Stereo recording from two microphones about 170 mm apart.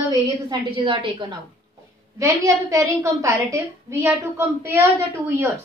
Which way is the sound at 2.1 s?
20° right (ahead or behind).